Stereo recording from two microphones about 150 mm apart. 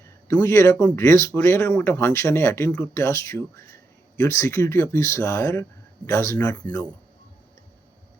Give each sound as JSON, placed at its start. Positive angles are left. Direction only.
{"t": 0.3, "sound": "speech", "side_deg": 15}